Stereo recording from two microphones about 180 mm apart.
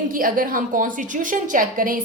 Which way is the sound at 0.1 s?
50° right (ahead or behind).